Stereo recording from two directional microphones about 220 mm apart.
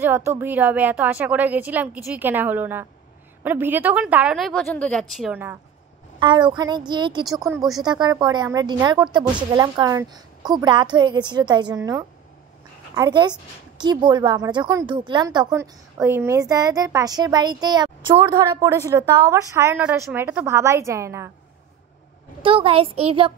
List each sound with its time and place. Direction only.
0.0 s a woman's voice: 10° right (ahead or behind)
6.1 s a woman's voice: 20° right (ahead or behind)
22.4 s speech: 25° right (ahead or behind)